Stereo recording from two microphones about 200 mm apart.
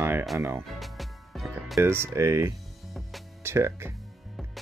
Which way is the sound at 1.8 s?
10° right (ahead or behind).